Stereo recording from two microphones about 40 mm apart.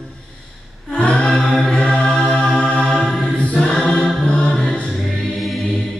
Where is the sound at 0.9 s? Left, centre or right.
Left.